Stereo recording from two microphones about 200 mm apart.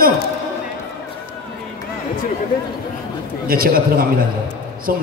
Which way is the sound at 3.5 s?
45° right (ahead or behind).